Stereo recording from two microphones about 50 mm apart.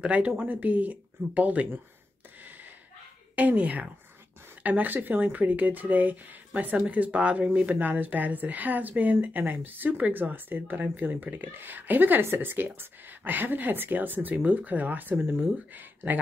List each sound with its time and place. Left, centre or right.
0.0 s speech: right
3.3 s speech: right
12.2 s speech: right